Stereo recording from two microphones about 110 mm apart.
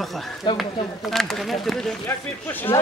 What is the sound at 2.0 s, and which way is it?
Speech, 20° left (ahead or behind).